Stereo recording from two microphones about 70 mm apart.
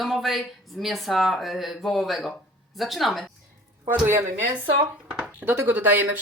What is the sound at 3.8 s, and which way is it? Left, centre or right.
Speech, right.